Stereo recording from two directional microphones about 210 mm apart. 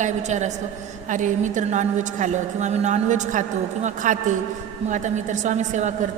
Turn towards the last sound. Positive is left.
turn(degrees=-35)  # may be behind; listen again after turning